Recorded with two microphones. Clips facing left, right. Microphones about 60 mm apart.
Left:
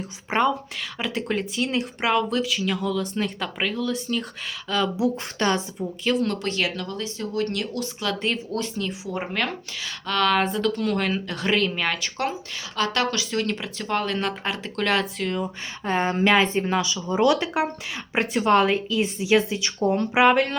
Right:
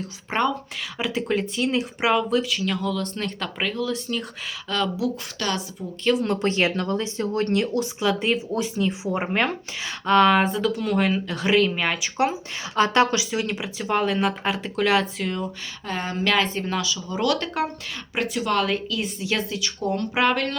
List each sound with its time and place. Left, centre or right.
0.3 s speech: centre
4.9 s a woman's voice: left
6.2 s speech: right
8.0 s speech: centre
10.4 s speech: centre
12.7 s speech: right
13.3 s speech: centre
15.9 s a woman's voice: left
17.3 s speech: centre
18.1 s a woman's voice: left